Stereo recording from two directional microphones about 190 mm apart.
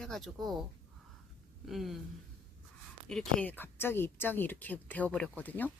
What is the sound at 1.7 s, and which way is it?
Speech, centre (ahead or behind).